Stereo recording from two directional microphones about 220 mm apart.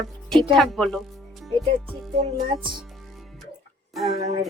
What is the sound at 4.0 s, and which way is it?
Speech, 30° right (ahead or behind).